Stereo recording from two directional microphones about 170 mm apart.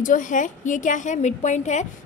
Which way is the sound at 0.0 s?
50° left (ahead or behind).